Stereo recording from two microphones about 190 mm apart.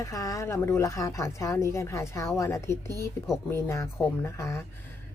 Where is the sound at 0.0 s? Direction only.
15° left (ahead or behind).